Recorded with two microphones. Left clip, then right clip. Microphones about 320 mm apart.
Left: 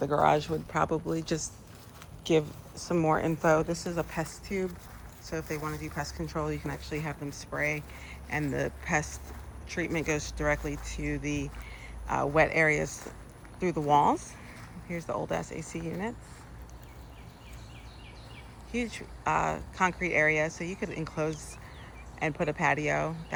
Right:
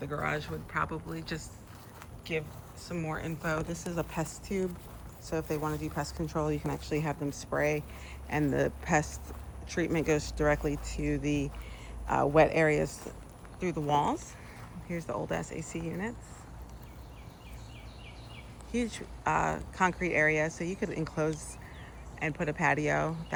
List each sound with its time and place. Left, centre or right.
0.0 s speech: centre
3.1 s speech: centre
18.7 s speech: centre